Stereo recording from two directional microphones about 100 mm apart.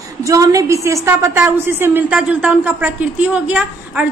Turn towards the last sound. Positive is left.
turn(degrees=-15)  # may be behind; listen again after turning